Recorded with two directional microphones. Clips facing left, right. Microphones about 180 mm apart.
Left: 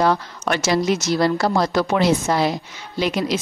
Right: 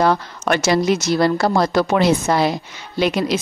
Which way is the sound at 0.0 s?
55° right (ahead or behind).